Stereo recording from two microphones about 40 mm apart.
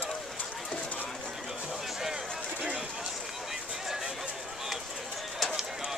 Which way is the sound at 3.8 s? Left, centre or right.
Centre.